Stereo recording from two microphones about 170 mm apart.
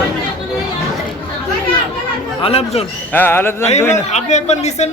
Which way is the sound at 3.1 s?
10° left (ahead or behind).